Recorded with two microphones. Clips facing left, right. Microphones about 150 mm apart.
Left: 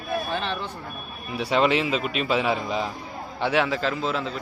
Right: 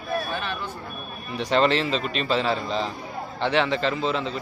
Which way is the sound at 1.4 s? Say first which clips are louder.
Even; 10° left (ahead or behind).